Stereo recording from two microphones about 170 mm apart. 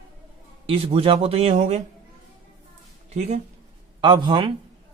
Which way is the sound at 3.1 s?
40° right (ahead or behind).